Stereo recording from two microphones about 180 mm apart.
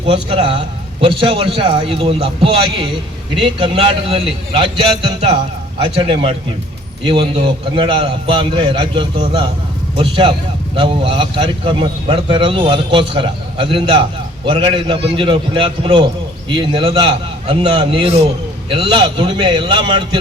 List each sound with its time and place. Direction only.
0.1 s a man's voice: 35° right (ahead or behind)